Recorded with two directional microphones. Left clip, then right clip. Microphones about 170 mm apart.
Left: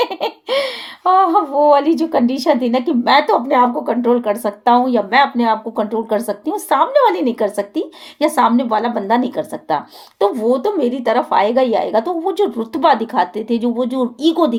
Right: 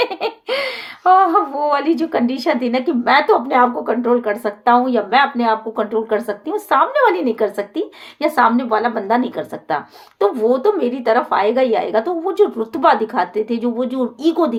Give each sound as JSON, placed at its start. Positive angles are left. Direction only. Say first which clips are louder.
{"t": 1.0, "sound": "speech", "louder": "even", "side_deg": 35}